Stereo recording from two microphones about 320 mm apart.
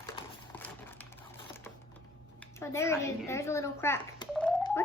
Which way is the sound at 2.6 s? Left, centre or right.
Centre.